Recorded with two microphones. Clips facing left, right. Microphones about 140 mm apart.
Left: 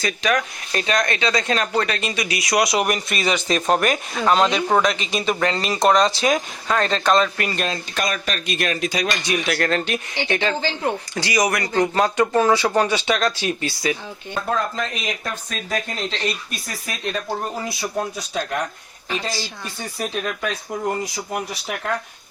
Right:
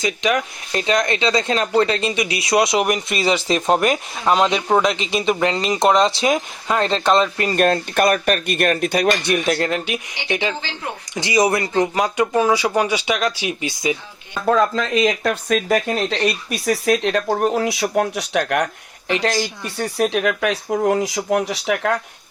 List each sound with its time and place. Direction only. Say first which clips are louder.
0.0 s speech: right 2 dB; 20° right (ahead or behind)
7.5 s speech: right 9 dB; 55° right (ahead or behind)
9.6 s speech: even; 10° right (ahead or behind)
11.1 s speech: right 7 dB; 20° right (ahead or behind)
11.9 s speech: even; 10° right (ahead or behind)
15.0 s speech: right 10 dB; 75° right (ahead or behind); by 21.9 s 90° right